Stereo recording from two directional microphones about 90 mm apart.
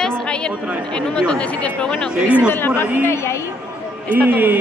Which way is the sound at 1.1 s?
15° left (ahead or behind).